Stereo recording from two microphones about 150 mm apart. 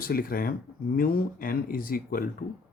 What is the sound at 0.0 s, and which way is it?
Speech, 75° left (ahead or behind).